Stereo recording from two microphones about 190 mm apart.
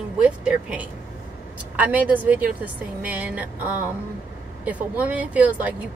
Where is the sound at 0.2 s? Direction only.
5° right (ahead or behind).